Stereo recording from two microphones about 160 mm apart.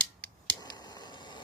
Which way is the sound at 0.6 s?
25° left (ahead or behind).